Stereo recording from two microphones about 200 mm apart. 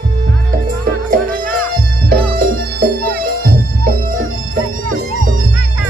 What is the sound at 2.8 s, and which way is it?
Music, 45° right (ahead or behind).